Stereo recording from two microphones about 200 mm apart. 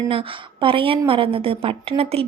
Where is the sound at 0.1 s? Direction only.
25° right (ahead or behind).